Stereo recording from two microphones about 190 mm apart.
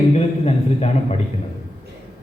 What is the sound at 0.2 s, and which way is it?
A man's voice, 35° left (ahead or behind).